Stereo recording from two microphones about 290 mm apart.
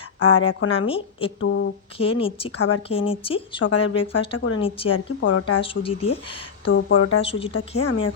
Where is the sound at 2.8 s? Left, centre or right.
Centre.